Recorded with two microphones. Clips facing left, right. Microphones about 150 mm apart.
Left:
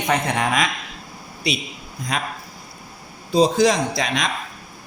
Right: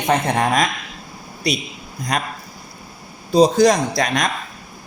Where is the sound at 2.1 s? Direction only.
45° right (ahead or behind).